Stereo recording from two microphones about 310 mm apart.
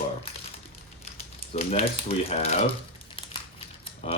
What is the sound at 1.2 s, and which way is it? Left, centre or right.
Speech, centre.